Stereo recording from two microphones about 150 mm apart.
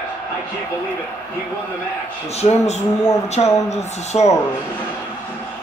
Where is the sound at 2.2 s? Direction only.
45° left (ahead or behind).